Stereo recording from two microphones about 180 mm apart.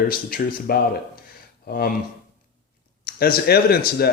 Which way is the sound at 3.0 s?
55° left (ahead or behind).